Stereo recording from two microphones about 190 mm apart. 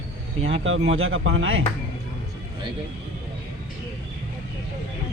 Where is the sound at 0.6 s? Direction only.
90° right.